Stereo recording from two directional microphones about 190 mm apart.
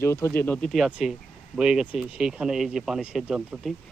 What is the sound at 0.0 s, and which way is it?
Speech, 15° left (ahead or behind).